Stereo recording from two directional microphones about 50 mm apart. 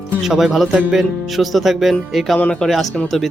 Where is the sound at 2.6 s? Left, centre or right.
Centre.